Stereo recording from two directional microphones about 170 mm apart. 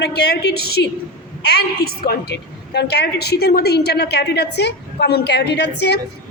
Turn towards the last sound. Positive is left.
turn(degrees=85)